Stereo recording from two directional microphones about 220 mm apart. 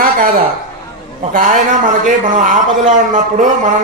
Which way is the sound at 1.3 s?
35° right (ahead or behind).